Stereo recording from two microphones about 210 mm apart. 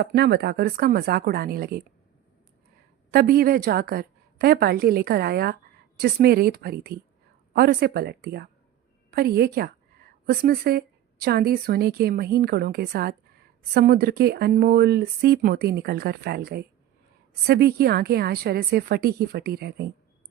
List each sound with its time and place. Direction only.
0.0 s speech: 55° right (ahead or behind)
3.1 s a woman's voice: 45° right (ahead or behind)